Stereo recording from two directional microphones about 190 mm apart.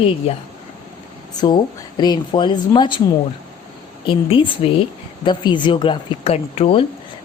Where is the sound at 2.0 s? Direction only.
25° left (ahead or behind).